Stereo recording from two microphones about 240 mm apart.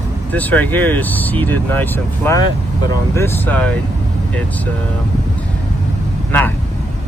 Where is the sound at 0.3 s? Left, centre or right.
Centre.